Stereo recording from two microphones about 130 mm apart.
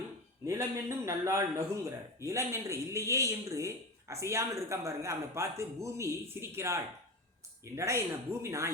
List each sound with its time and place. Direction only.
0.4 s a man's voice: 20° right (ahead or behind)